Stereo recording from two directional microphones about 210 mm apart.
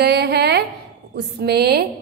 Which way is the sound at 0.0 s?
50° right (ahead or behind).